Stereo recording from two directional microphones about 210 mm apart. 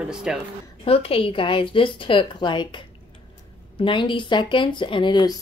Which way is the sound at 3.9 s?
25° left (ahead or behind).